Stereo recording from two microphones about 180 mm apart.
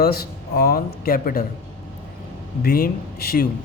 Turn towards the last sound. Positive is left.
turn(degrees=55)  # may be behind; listen again after turning